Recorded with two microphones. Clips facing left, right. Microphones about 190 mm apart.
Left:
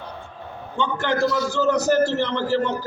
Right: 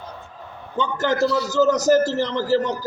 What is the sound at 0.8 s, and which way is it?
A man's voice, 40° right (ahead or behind).